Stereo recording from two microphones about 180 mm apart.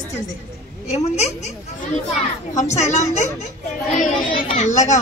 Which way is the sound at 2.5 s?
40° left (ahead or behind).